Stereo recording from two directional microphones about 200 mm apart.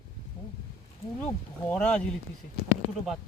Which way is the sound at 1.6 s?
5° left (ahead or behind).